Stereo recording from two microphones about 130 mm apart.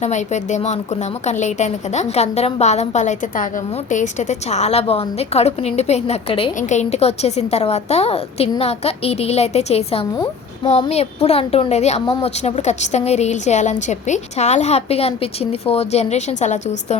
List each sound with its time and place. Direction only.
0.0 s a woman's voice: 60° left (ahead or behind)
6.6 s a woman's voice: 65° left (ahead or behind)